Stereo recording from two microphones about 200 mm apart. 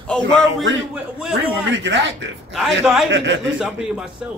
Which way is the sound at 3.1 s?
65° right (ahead or behind).